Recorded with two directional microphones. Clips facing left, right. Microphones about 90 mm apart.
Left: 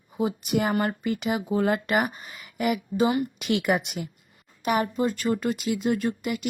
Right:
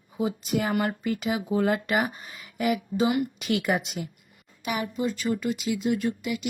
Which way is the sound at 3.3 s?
60° left (ahead or behind).